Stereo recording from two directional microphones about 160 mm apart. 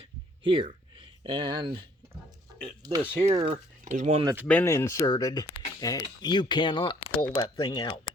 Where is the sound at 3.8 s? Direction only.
50° right (ahead or behind).